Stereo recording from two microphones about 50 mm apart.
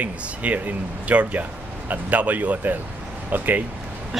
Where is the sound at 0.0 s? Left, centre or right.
Right.